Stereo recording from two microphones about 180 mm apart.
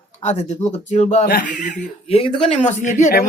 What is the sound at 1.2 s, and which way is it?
Speech, 60° left (ahead or behind).